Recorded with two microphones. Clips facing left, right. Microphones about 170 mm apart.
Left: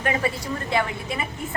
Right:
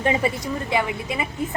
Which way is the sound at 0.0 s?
20° right (ahead or behind).